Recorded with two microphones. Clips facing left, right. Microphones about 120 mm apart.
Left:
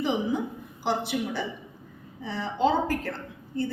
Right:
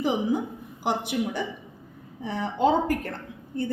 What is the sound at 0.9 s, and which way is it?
A woman's voice, 50° right (ahead or behind).